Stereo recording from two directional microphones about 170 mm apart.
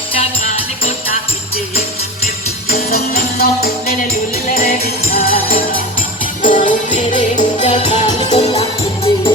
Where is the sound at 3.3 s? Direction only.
65° left (ahead or behind); by 8.6 s 40° left (ahead or behind).